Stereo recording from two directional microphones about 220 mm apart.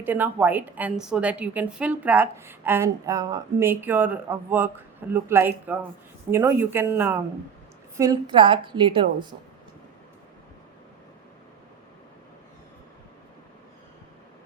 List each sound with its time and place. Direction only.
0.0 s a woman's voice: 10° right (ahead or behind)